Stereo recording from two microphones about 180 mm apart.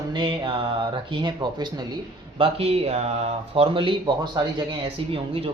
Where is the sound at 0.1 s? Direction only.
25° right (ahead or behind).